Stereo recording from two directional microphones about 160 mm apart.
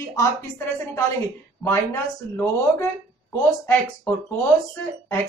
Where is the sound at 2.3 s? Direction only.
20° left (ahead or behind).